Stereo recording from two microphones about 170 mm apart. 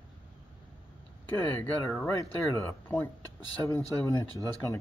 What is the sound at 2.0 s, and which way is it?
Speech, 20° left (ahead or behind).